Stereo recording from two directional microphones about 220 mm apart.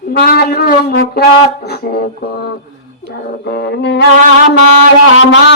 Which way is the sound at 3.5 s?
50° left (ahead or behind).